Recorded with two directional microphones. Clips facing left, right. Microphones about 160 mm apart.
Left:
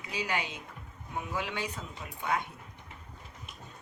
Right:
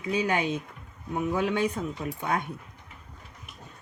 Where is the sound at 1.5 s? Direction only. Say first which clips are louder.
Right 10 dB; 45° right (ahead or behind).